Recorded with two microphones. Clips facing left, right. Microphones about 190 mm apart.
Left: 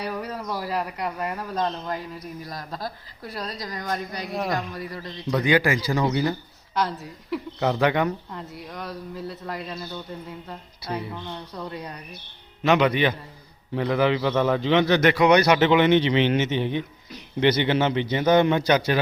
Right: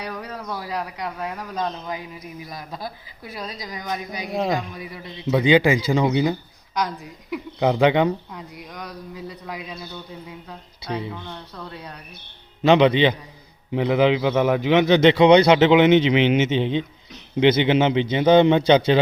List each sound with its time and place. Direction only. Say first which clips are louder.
0.0 s speech: left 2 dB; 10° left (ahead or behind)
4.9 s speech: right 5 dB; 20° right (ahead or behind)
6.7 s speech: even; centre (ahead or behind)
7.6 s speech: right 5 dB; 15° right (ahead or behind)
8.3 s speech: left 1 dB; centre (ahead or behind)
12.6 s a man's voice: right 5 dB; 25° right (ahead or behind)
14.8 s speech: right 6 dB; 25° right (ahead or behind)